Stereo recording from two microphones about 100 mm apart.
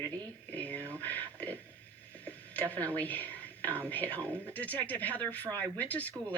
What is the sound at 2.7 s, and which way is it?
Speech, 15° left (ahead or behind).